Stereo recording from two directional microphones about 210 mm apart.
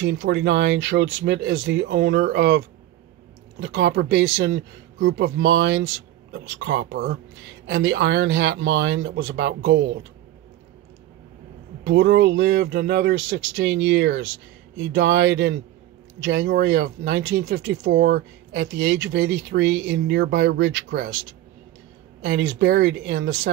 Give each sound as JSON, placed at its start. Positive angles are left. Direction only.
{"t": 0.0, "sound": "speech", "side_deg": -60}
{"t": 11.8, "sound": "speech", "side_deg": -55}
{"t": 22.6, "sound": "speech", "side_deg": -45}
{"t": 22.8, "sound": "speech", "side_deg": -65}